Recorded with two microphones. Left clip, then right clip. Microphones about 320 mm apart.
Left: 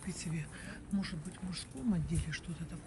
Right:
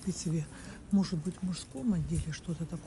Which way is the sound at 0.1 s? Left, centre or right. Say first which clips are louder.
Right 7 dB; centre.